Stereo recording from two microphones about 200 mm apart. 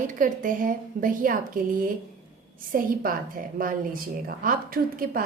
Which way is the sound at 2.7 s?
45° right (ahead or behind).